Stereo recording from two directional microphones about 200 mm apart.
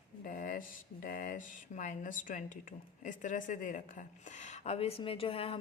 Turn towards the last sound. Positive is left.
turn(degrees=25)  # may be behind; listen again after turning